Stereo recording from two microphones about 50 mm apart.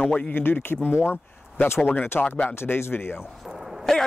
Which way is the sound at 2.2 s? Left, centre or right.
Left.